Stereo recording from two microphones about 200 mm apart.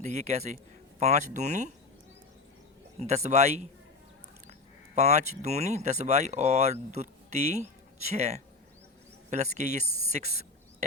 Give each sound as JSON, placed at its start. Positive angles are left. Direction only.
{"t": 0.0, "sound": "speech", "side_deg": -35}
{"t": 3.0, "sound": "speech", "side_deg": -35}
{"t": 4.9, "sound": "speech", "side_deg": -35}
{"t": 10.1, "sound": "a sound", "side_deg": -35}